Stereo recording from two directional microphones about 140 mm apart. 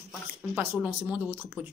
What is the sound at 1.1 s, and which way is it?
Speech, 15° right (ahead or behind).